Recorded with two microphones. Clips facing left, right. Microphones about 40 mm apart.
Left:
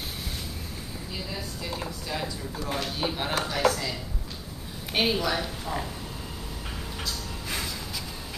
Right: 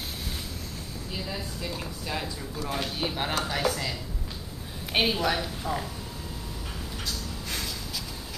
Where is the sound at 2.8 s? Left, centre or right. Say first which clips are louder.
Even; centre.